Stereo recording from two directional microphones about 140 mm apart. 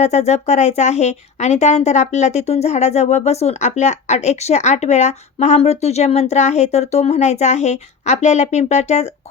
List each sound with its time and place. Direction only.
0.0 s speech: 55° left (ahead or behind)